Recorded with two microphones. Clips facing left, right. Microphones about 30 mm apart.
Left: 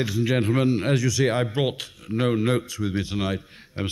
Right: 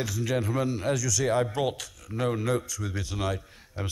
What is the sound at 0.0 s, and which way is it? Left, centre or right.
Speech, left.